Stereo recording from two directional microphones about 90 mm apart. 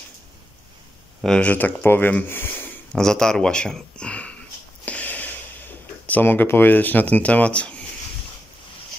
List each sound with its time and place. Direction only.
1.2 s speech: 10° left (ahead or behind)
2.9 s speech: 5° left (ahead or behind)
4.8 s a sound: 20° left (ahead or behind)
6.0 s speech: 20° left (ahead or behind)